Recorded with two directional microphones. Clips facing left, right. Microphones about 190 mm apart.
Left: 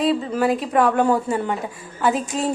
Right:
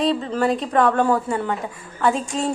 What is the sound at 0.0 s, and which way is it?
A woman's voice, 5° left (ahead or behind).